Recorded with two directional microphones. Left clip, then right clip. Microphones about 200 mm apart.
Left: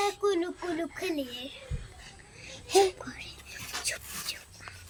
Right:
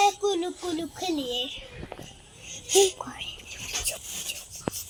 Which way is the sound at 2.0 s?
50° left (ahead or behind).